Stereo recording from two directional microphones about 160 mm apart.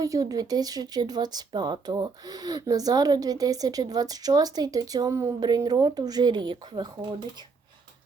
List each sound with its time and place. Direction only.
0.0 s speech: 20° right (ahead or behind)